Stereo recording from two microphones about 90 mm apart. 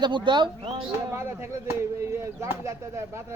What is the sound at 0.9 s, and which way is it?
Speech, 30° right (ahead or behind).